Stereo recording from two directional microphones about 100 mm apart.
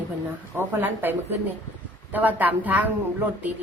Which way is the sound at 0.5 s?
20° right (ahead or behind).